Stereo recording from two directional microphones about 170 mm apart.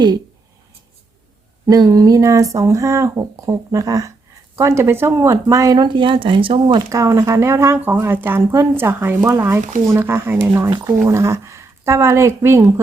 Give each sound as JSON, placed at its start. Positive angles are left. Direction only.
{"t": 1.7, "sound": "speech", "side_deg": -20}
{"t": 10.7, "sound": "speech", "side_deg": -25}
{"t": 11.0, "sound": "speech", "side_deg": -15}